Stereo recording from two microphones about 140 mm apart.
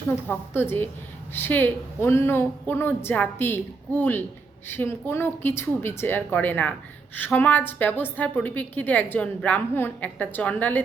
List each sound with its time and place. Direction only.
0.3 s a woman's voice: 15° left (ahead or behind)